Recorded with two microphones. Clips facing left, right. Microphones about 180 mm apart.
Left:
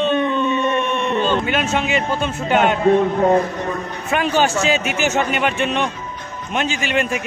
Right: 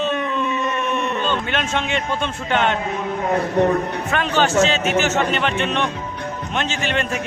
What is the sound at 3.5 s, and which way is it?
Speech, 70° right (ahead or behind).